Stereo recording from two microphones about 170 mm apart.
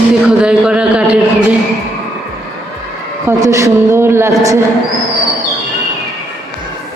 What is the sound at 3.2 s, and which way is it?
A man's voice, 15° right (ahead or behind).